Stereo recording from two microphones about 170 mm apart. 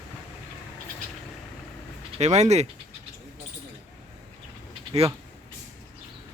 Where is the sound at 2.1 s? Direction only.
40° right (ahead or behind).